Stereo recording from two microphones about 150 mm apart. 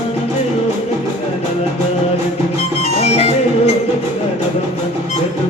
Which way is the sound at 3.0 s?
45° left (ahead or behind).